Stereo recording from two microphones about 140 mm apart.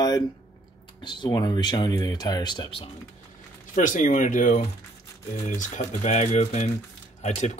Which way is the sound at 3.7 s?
65° left (ahead or behind).